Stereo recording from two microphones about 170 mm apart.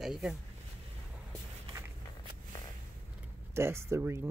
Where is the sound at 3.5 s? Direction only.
15° right (ahead or behind).